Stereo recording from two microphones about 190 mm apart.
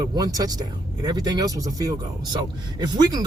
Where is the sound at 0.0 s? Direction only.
20° right (ahead or behind).